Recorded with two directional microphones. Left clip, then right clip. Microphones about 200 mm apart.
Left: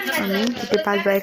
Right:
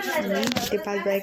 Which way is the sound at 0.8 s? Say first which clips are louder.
Left 6 dB; 20° left (ahead or behind).